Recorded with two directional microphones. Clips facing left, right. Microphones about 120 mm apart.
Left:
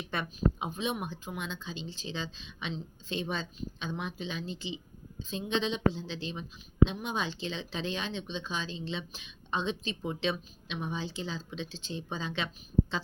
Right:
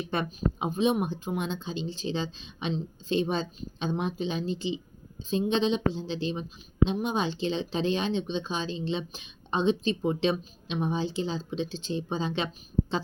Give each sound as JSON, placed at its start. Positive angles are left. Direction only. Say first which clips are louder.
{"t": 0.1, "sound": "speech", "louder": "left 1 dB", "side_deg": -30}